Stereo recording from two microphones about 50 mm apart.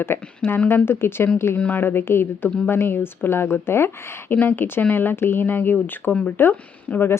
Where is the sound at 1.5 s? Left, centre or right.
Left.